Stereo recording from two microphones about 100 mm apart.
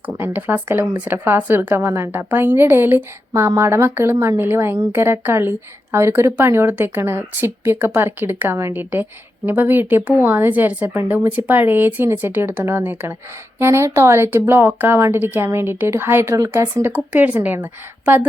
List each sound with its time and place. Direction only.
0.1 s speech: 20° right (ahead or behind)